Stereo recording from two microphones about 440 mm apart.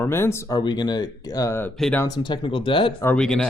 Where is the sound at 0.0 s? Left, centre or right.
Centre.